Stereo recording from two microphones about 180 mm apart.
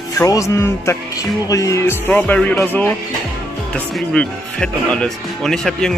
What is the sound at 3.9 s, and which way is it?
Speech, 5° left (ahead or behind).